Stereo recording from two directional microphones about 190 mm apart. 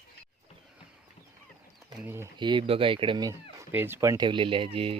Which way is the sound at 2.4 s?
25° right (ahead or behind).